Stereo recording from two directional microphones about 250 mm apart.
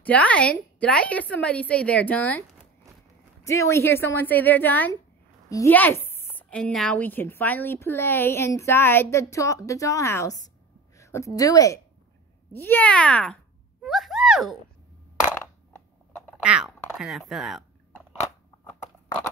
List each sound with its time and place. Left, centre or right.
0.0 s a woman's voice: centre
3.4 s a woman's voice: centre
16.4 s speech: centre